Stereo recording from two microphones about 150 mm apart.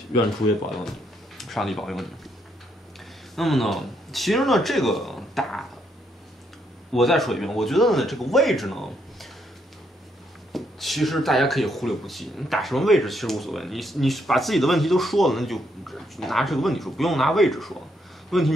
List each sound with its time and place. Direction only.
1.4 s speech: centre (ahead or behind)
3.3 s speech: centre (ahead or behind)
6.9 s speech: centre (ahead or behind)
10.5 s speech: centre (ahead or behind)